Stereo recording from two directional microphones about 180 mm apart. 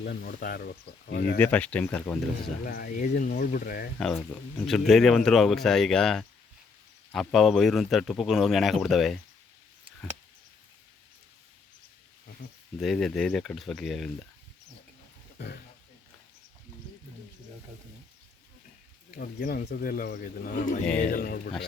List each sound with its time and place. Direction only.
0.0 s speech: 65° left (ahead or behind)
1.4 s speech: 10° left (ahead or behind)
2.6 s speech: 55° left (ahead or behind)
4.6 s speech: centre (ahead or behind)
12.8 s speech: centre (ahead or behind)
15.4 s a man's voice: 60° left (ahead or behind)
19.1 s speech: 55° left (ahead or behind)
20.8 s speech: 5° left (ahead or behind)
21.1 s speech: 55° left (ahead or behind)